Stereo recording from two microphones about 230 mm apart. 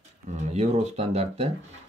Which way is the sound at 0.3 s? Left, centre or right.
Right.